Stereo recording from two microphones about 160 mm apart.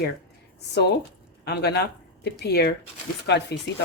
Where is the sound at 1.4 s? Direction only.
90° left.